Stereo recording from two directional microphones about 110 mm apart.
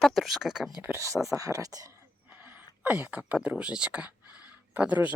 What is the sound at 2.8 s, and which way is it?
A woman's voice, 20° right (ahead or behind).